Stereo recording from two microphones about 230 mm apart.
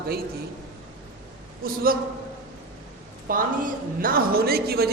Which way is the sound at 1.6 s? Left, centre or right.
Right.